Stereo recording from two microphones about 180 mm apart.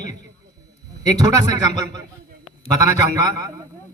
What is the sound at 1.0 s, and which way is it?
Speech, 20° right (ahead or behind).